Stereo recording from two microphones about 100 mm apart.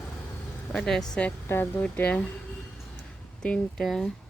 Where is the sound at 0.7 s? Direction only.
5° left (ahead or behind).